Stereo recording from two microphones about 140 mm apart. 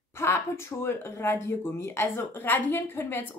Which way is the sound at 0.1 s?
20° left (ahead or behind).